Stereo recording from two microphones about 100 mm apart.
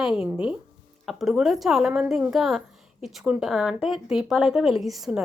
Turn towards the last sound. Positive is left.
turn(degrees=-5)  # may be behind; listen again after turning